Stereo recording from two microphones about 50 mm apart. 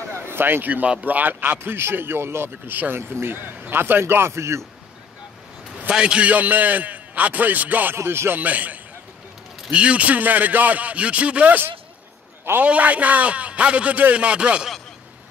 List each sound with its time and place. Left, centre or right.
0.1 s a sound: right
1.0 s speech: right
2.5 s a man's voice: right
3.0 s speech: right
4.0 s speech: right
5.9 s a man's voice: centre
7.9 s music: right
8.4 s a man's voice: right
12.6 s speech: right